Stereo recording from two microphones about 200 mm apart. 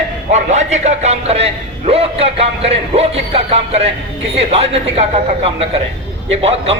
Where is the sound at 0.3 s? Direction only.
35° right (ahead or behind).